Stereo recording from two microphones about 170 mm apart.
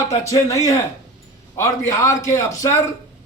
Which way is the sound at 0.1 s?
20° left (ahead or behind).